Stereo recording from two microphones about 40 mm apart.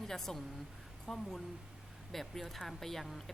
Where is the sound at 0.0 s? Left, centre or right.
Centre.